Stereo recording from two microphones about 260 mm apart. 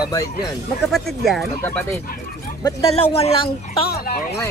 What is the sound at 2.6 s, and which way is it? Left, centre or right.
Speech, left.